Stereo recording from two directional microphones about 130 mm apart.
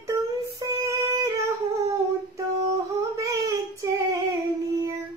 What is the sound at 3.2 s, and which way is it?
Child singing, 25° right (ahead or behind).